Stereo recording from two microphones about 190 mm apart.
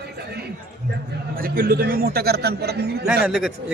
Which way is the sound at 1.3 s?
50° right (ahead or behind).